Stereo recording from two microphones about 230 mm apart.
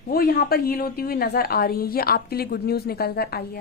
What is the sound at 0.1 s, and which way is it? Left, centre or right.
A woman's voice, left.